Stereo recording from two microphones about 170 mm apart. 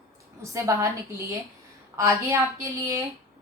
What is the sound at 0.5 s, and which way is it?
Speech, 20° right (ahead or behind).